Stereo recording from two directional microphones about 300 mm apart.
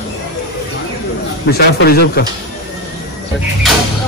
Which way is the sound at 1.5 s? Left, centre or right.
Left.